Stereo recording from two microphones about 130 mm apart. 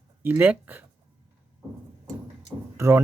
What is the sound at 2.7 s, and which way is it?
Speech, 20° right (ahead or behind).